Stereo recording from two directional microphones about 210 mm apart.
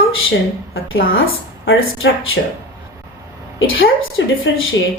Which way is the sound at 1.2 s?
70° left (ahead or behind).